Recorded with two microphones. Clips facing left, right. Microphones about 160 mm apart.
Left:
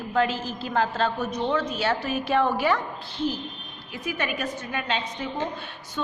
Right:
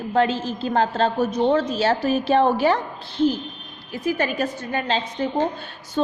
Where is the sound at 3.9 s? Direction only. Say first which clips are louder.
Right 7 dB; 35° right (ahead or behind).